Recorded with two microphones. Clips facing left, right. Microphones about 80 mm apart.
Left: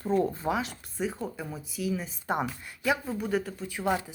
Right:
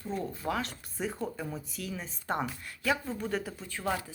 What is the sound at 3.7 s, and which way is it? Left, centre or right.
Speech, centre.